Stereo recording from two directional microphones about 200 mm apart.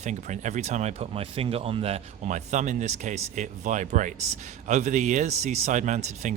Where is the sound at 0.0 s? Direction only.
35° right (ahead or behind).